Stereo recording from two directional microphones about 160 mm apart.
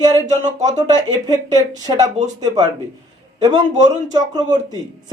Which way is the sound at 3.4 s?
25° right (ahead or behind).